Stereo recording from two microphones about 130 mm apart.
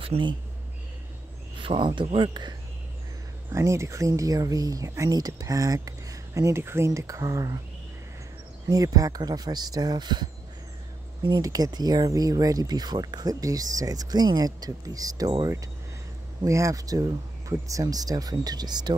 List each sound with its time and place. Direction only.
0.0 s speech: 40° right (ahead or behind)
1.6 s speech: 45° right (ahead or behind)
3.5 s speech: 20° right (ahead or behind)
8.6 s speech: 25° right (ahead or behind)